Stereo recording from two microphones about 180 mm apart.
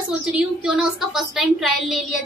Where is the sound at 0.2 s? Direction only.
5° right (ahead or behind).